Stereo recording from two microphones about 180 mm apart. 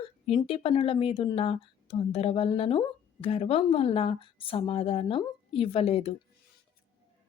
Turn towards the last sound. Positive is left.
turn(degrees=35)  # may be behind; listen again after turning